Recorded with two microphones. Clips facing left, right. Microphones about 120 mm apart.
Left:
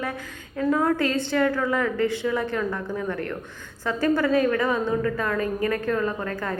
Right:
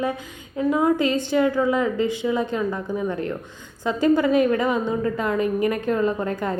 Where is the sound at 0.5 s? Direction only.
15° right (ahead or behind).